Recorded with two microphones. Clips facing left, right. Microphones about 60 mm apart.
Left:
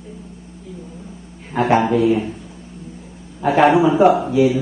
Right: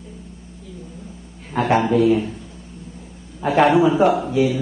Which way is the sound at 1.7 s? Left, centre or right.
Centre.